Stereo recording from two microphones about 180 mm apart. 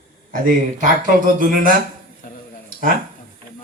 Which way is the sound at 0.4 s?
45° right (ahead or behind).